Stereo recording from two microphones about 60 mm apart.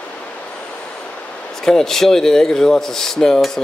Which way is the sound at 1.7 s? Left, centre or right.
Centre.